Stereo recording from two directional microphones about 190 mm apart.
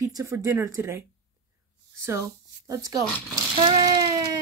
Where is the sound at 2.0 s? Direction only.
15° right (ahead or behind).